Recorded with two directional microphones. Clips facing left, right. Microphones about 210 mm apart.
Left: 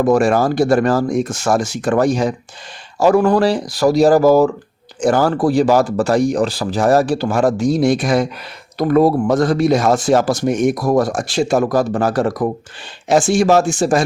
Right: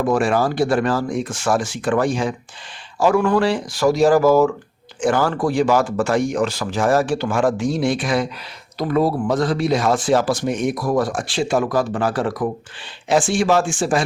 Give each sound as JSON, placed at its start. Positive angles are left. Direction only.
{"t": 0.0, "sound": "speech", "side_deg": 40}